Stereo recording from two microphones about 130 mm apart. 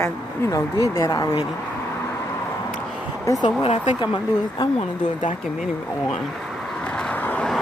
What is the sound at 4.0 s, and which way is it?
Speech, 35° left (ahead or behind).